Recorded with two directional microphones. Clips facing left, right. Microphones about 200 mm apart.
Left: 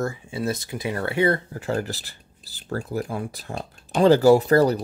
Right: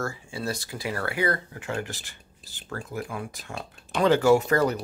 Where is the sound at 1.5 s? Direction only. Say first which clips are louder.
Left 6 dB; 35° left (ahead or behind).